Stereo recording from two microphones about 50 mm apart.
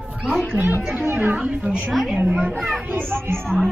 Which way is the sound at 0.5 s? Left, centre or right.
Right.